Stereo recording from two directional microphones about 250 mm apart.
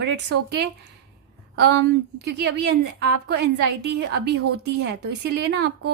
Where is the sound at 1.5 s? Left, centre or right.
Right.